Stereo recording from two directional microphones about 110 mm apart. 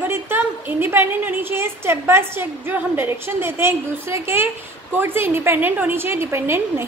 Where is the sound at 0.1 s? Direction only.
20° right (ahead or behind).